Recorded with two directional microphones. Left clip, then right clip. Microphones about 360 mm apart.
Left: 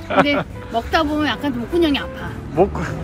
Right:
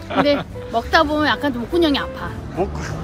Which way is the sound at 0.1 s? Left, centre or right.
Centre.